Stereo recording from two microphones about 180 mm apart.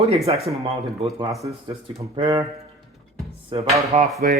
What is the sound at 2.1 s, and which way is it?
Speech, 20° right (ahead or behind).